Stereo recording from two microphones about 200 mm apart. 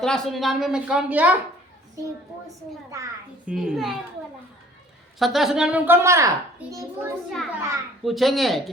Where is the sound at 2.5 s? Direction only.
15° right (ahead or behind).